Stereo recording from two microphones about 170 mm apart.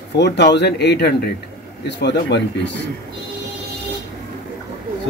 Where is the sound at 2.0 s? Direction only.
90° left.